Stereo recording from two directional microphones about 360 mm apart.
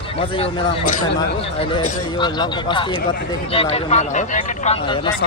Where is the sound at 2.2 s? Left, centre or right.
Centre.